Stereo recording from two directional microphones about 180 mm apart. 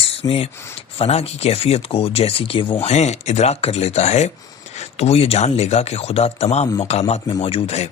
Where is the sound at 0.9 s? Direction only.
35° left (ahead or behind).